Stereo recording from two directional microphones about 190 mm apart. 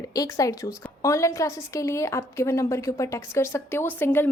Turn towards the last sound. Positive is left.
turn(degrees=10)  # may be behind; listen again after turning